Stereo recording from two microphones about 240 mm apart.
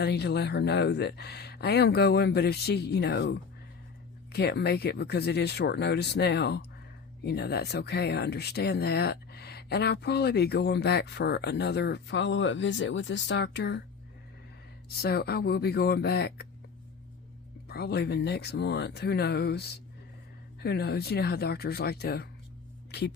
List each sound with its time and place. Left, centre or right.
0.0 s speech: left
14.8 s speech: left
17.7 s speech: left